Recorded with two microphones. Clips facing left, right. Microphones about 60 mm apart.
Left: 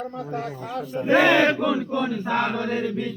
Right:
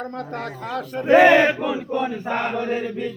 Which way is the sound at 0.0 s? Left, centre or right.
Right.